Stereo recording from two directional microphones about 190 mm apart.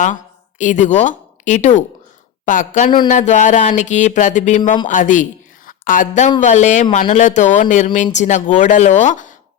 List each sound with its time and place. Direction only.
0.6 s a woman's voice: 40° left (ahead or behind)